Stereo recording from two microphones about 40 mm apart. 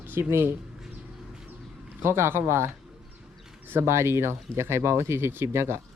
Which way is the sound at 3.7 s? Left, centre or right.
Right.